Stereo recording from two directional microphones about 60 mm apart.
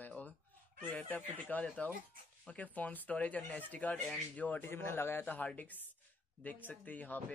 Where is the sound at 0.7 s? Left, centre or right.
Left.